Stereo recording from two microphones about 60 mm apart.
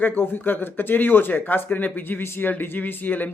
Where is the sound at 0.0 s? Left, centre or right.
Left.